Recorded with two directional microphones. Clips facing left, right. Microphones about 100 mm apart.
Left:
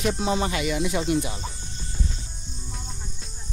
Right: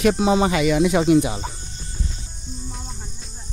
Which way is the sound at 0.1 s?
15° right (ahead or behind).